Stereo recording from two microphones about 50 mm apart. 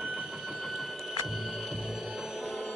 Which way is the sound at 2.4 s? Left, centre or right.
Centre.